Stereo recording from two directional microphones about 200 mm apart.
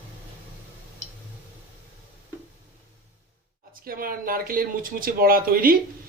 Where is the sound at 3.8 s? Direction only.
45° right (ahead or behind).